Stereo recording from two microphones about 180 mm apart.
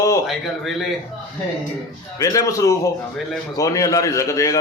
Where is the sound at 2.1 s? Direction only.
20° left (ahead or behind).